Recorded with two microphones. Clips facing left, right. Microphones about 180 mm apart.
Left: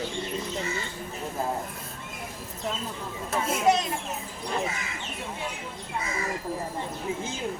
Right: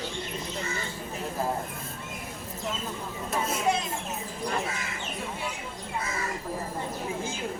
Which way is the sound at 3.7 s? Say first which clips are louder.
Left 5 dB; 75° left (ahead or behind).